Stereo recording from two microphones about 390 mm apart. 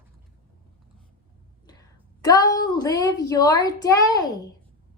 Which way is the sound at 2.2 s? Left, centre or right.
Centre.